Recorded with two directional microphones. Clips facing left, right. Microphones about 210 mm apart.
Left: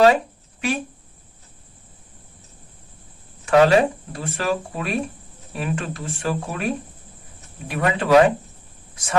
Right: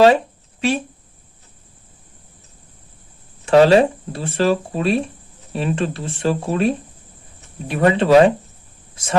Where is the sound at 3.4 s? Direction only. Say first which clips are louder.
Right 3 dB; 30° right (ahead or behind).